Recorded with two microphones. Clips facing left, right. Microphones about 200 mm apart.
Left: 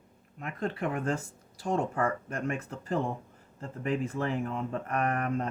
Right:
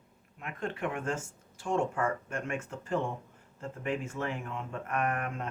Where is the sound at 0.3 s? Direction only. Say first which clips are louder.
Left 3 dB; 35° left (ahead or behind).